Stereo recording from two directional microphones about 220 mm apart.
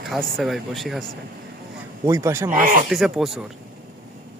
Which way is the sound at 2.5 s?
40° right (ahead or behind).